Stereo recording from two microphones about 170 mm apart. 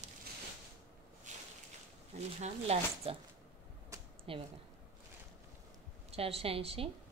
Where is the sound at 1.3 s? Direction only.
45° right (ahead or behind).